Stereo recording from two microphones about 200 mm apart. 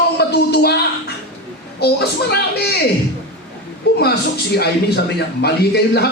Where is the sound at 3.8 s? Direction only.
55° left (ahead or behind).